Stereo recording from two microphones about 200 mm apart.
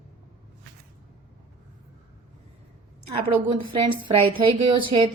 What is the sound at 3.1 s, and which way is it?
A woman's voice, 25° right (ahead or behind).